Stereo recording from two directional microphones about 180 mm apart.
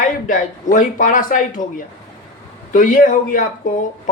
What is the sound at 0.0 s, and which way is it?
Speech, 50° left (ahead or behind).